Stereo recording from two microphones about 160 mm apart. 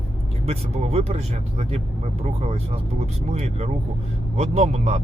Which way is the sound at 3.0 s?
45° right (ahead or behind).